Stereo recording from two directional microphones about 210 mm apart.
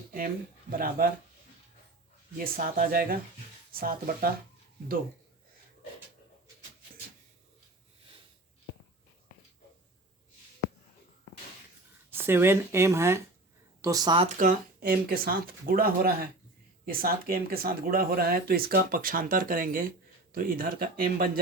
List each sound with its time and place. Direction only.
0.7 s speech: 45° right (ahead or behind)
2.4 s speech: 45° right (ahead or behind)
12.1 s speech: 10° right (ahead or behind)
14.3 s speech: 40° right (ahead or behind)